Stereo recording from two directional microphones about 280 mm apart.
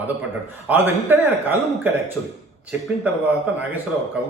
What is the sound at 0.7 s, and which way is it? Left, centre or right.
Speech, centre.